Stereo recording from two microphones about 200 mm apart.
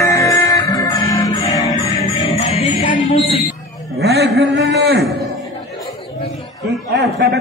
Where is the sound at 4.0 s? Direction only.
55° right (ahead or behind).